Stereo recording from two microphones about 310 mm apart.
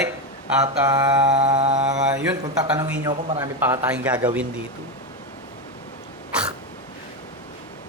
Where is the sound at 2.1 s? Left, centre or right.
Centre.